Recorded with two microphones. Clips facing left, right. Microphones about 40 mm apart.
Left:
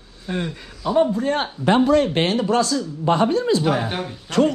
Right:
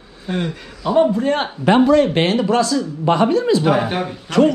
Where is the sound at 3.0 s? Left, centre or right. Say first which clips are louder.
Right 3 dB; right.